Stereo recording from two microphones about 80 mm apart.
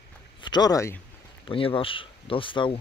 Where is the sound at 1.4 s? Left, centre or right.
Left.